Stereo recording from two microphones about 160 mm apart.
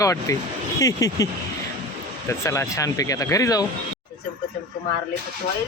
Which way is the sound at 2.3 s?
15° left (ahead or behind).